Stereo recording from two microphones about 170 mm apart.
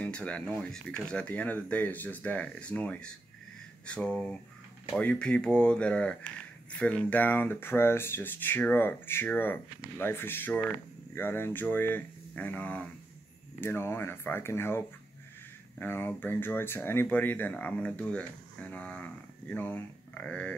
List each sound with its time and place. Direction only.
0.0 s speech: 5° left (ahead or behind)
15.8 s speech: 10° left (ahead or behind)